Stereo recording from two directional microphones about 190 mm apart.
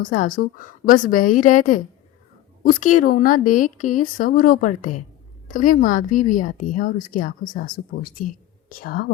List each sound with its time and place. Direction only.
0.0 s a woman's voice: 45° left (ahead or behind)